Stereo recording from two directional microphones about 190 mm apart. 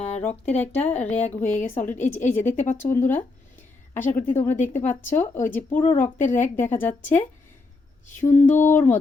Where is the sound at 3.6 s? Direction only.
10° left (ahead or behind).